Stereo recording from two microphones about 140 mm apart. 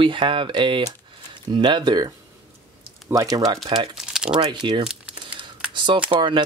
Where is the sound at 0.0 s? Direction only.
40° right (ahead or behind).